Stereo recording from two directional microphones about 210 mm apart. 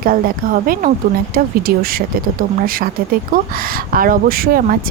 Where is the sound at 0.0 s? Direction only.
40° right (ahead or behind).